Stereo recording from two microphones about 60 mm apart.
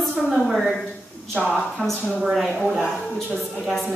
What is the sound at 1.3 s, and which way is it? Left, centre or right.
Speech, centre.